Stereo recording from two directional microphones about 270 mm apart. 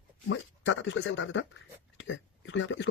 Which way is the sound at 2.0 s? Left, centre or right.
Left.